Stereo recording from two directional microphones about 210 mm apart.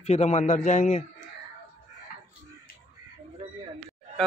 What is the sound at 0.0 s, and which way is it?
A man's voice, 30° left (ahead or behind).